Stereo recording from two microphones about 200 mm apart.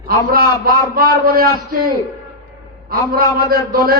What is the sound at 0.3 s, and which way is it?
A man's voice, 45° right (ahead or behind).